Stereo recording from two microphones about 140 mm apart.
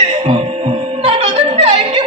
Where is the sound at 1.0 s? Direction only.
40° right (ahead or behind).